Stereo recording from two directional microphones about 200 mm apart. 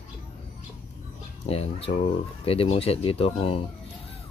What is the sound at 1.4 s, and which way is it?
Speech, 30° left (ahead or behind).